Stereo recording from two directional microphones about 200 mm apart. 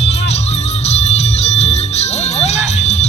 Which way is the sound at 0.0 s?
30° left (ahead or behind).